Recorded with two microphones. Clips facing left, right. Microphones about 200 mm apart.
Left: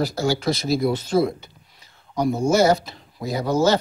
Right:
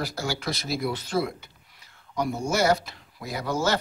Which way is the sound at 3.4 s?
40° left (ahead or behind).